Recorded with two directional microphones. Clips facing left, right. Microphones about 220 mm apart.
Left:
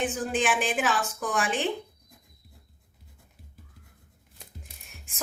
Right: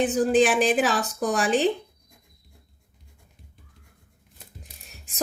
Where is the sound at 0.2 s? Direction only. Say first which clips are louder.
Right 8 dB; 35° right (ahead or behind).